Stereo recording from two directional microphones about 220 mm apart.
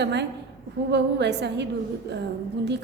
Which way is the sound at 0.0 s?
50° right (ahead or behind).